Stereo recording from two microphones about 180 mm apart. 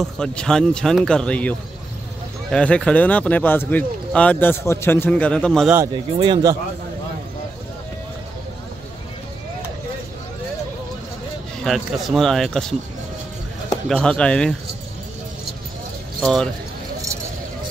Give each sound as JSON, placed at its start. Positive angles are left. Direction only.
{"t": 0.0, "sound": "speech", "side_deg": 5}
{"t": 6.1, "sound": "speech", "side_deg": -25}
{"t": 11.6, "sound": "speech", "side_deg": 0}
{"t": 13.8, "sound": "speech", "side_deg": 5}
{"t": 16.2, "sound": "speech", "side_deg": 0}